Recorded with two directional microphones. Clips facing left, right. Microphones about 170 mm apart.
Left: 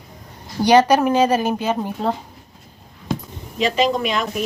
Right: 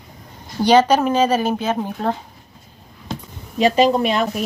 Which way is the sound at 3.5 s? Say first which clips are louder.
Right 4 dB; 40° right (ahead or behind).